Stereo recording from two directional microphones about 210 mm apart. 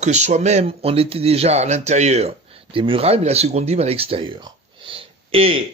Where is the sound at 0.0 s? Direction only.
35° right (ahead or behind).